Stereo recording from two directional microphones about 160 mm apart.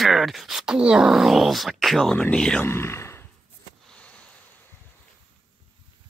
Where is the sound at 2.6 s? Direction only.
15° left (ahead or behind).